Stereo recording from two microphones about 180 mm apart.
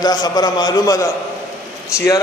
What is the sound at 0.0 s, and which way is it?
A man's voice, 20° left (ahead or behind).